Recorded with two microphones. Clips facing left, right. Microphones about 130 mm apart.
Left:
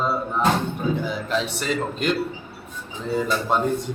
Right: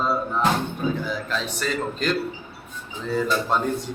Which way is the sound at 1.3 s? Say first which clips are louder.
Left 5 dB; 20° left (ahead or behind).